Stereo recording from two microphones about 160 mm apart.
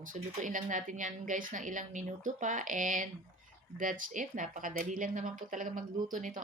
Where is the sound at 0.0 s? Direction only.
55° right (ahead or behind).